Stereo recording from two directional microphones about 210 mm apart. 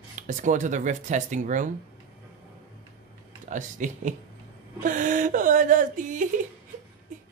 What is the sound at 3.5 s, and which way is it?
Speech, 35° right (ahead or behind).